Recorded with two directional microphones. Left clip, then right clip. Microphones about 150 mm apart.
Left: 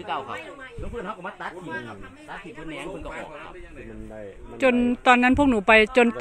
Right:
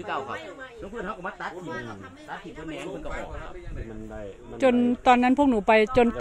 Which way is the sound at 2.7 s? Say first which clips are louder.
Even; 20° left (ahead or behind).